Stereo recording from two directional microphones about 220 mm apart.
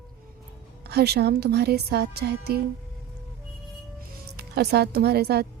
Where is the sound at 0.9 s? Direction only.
45° right (ahead or behind).